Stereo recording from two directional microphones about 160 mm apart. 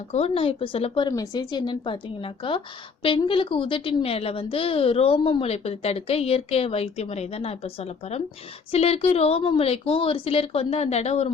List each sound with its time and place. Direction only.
0.1 s a woman's voice: 40° left (ahead or behind)
1.0 s a woman's voice: 25° left (ahead or behind); by 11.3 s 40° left (ahead or behind)